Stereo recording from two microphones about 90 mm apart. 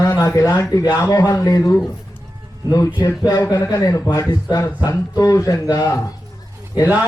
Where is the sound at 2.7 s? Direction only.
35° left (ahead or behind).